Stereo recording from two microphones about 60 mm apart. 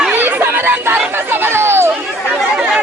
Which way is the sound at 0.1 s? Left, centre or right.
Right.